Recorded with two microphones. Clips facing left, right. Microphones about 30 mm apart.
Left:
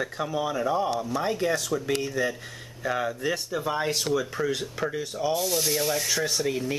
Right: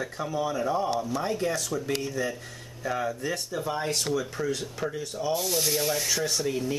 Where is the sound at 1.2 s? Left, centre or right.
Left.